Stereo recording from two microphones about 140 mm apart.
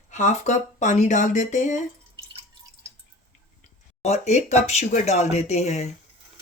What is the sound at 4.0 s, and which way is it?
Speech, 50° left (ahead or behind).